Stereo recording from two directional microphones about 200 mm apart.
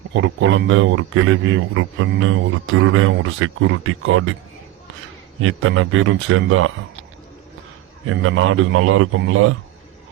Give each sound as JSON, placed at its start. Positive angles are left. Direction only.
{"t": 0.1, "sound": "a man's voice", "side_deg": -65}
{"t": 5.4, "sound": "speech", "side_deg": -90}
{"t": 8.0, "sound": "speech", "side_deg": -90}